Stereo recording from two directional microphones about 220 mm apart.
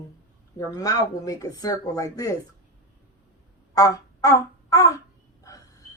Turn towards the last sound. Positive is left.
turn(degrees=15)  # may be behind; listen again after turning